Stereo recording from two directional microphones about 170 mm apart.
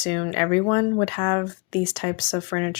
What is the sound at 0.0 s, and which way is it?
Speech, 30° left (ahead or behind).